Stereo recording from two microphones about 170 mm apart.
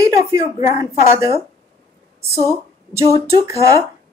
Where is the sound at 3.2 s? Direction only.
20° right (ahead or behind).